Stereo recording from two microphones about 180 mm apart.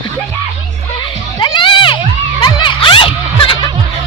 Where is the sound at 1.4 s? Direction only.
25° left (ahead or behind).